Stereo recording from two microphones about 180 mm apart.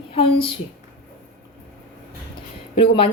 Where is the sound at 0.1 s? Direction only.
30° left (ahead or behind).